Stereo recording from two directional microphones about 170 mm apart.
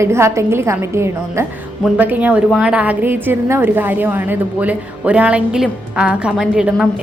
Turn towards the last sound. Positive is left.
turn(degrees=-5)  # may be behind; listen again after turning